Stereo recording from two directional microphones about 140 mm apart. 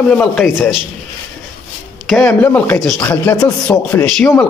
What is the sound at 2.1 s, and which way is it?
Speech, 10° left (ahead or behind).